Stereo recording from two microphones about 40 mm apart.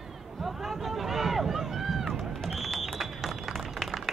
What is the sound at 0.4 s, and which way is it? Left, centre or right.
Run, centre.